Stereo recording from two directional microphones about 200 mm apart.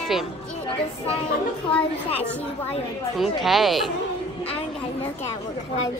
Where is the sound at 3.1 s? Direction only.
Centre (ahead or behind).